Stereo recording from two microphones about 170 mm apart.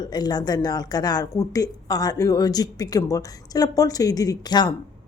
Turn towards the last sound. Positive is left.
turn(degrees=25)  # may be behind; listen again after turning